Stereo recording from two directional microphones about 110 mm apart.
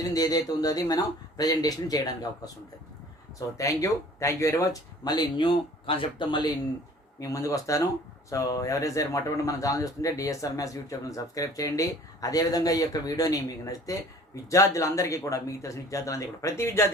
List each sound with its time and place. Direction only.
0.1 s a man's voice: 35° left (ahead or behind)
3.6 s a man's voice: 30° left (ahead or behind)
7.2 s a man's voice: 30° left (ahead or behind)